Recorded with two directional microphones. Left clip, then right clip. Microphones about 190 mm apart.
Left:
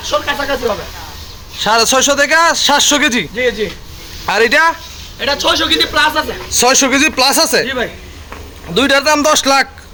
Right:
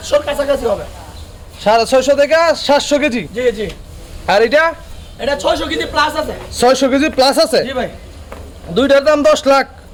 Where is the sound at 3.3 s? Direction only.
70° right (ahead or behind).